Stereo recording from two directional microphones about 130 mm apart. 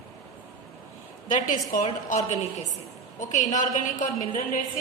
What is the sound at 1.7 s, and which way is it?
Speech, 90° left.